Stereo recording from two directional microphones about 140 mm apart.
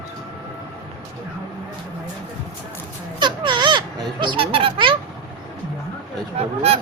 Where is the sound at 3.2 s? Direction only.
35° right (ahead or behind).